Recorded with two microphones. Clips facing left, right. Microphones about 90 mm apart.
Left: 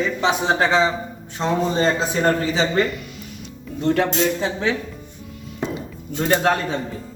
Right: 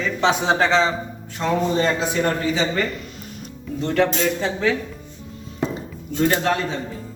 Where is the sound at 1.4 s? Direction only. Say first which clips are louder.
Even; 30° left (ahead or behind).